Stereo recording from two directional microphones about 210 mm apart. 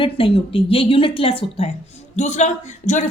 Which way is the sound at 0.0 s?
25° left (ahead or behind).